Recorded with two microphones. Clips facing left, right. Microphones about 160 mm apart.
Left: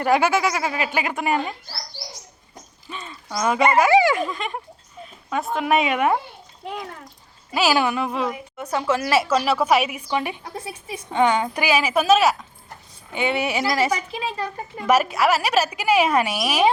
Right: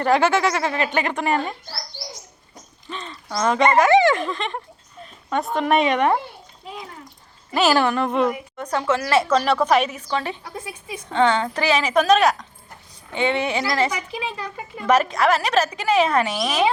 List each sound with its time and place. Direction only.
0.0 s a woman's voice: 10° left (ahead or behind)
2.9 s a woman's voice: 10° left (ahead or behind)
7.5 s a woman's voice: 5° left (ahead or behind)
13.9 s speech: 30° left (ahead or behind)
14.8 s a woman's voice: 10° left (ahead or behind)